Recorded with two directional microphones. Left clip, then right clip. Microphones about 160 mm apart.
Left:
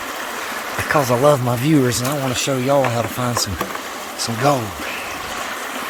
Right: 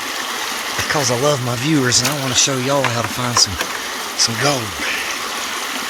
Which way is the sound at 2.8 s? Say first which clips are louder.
Even; 15° left (ahead or behind).